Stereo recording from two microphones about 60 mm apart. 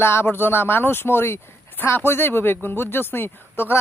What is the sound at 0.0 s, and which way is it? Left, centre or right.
Speech, left.